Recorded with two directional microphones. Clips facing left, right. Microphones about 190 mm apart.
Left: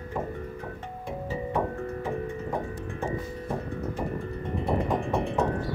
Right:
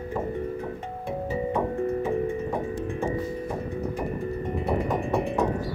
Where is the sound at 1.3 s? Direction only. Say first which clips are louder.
Right 2 dB; 15° right (ahead or behind).